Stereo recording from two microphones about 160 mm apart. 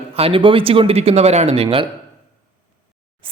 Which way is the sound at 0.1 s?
35° right (ahead or behind).